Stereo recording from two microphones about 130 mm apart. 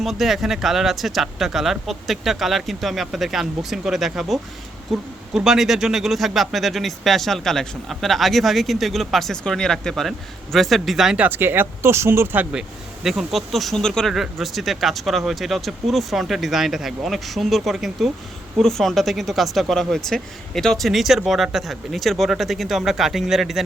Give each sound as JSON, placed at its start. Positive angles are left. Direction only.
{"t": 0.0, "sound": "speech", "side_deg": 0}
{"t": 11.3, "sound": "speech", "side_deg": -15}
{"t": 13.0, "sound": "speech", "side_deg": -5}